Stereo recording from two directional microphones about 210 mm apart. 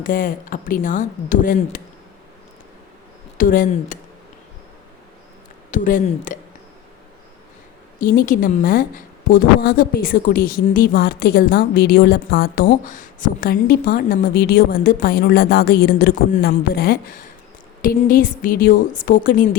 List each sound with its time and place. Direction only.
0.0 s speech: 40° left (ahead or behind)
3.3 s speech: 40° left (ahead or behind)
5.7 s speech: 40° left (ahead or behind)
7.9 s a woman's voice: 40° left (ahead or behind)